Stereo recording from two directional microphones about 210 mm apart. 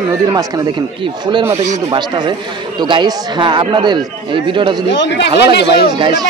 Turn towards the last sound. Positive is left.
turn(degrees=-20)  # may be behind; listen again after turning